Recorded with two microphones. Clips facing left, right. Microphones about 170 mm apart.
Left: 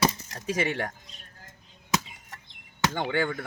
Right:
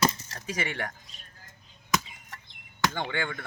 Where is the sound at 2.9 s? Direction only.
5° left (ahead or behind).